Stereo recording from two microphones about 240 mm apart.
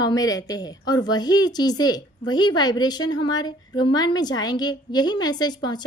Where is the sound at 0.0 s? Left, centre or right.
Centre.